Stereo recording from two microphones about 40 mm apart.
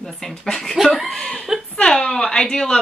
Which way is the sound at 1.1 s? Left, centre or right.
Centre.